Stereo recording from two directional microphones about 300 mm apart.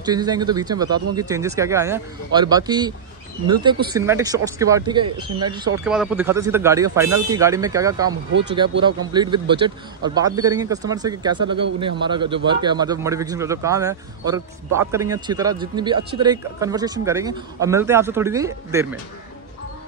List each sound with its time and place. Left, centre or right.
0.0 s speech: centre
5.9 s speech: centre
8.1 s speech: right
8.8 s speech: centre